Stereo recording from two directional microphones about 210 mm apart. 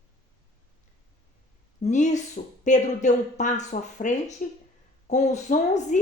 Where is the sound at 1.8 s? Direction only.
35° left (ahead or behind).